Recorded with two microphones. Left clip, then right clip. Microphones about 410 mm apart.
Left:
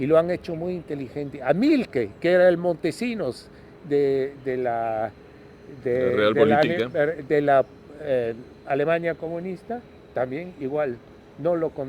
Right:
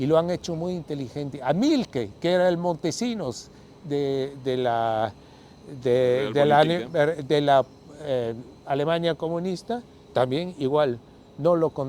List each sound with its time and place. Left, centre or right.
0.0 s speech: right